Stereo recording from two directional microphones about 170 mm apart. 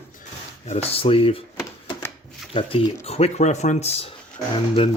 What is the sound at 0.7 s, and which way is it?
Speech, 35° left (ahead or behind).